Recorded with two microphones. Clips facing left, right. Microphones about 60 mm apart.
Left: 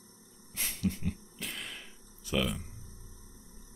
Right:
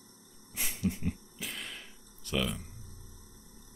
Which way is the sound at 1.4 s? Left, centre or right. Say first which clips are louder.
Even; centre.